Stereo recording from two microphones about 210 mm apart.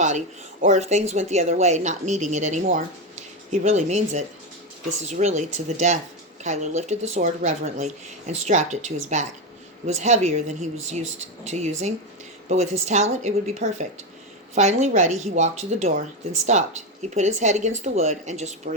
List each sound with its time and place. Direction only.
0.6 s speech: 35° right (ahead or behind)